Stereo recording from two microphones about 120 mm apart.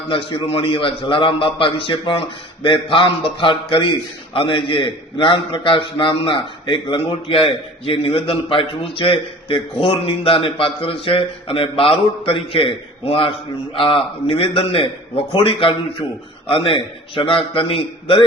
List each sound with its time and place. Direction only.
0.1 s a man's voice: 50° left (ahead or behind)